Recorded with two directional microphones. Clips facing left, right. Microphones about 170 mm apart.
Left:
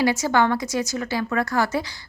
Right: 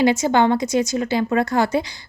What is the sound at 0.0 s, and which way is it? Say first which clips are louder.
A woman's voice: right 4 dB; 20° right (ahead or behind).